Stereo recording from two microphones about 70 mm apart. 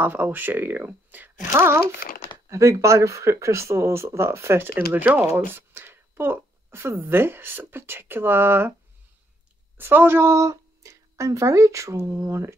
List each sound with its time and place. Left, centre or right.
0.0 s speech: right
1.6 s speech: right
9.8 s speech: right